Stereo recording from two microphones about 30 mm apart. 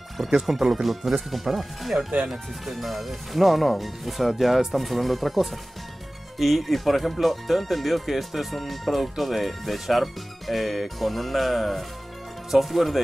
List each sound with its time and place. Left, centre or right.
0.3 s speech: centre